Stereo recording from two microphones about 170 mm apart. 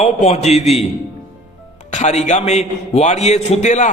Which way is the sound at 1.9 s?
40° left (ahead or behind).